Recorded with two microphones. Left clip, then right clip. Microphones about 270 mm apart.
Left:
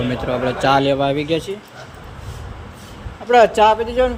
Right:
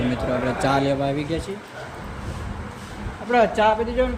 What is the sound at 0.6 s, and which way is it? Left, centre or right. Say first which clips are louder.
Speech: left 8 dB; centre.